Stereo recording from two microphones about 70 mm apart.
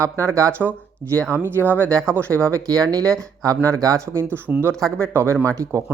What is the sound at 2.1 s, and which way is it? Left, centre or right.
Speech, right.